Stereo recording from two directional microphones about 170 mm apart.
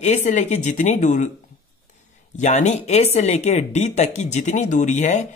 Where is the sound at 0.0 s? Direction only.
45° left (ahead or behind).